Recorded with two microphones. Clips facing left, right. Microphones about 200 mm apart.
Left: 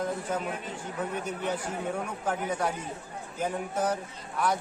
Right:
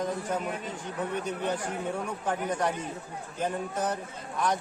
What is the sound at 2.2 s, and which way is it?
A man's voice, 10° left (ahead or behind).